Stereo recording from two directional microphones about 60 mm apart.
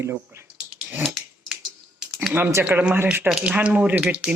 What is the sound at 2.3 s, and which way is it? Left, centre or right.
Speech, right.